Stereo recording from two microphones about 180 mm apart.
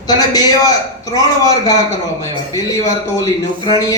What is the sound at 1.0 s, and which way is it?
Speech, 20° left (ahead or behind).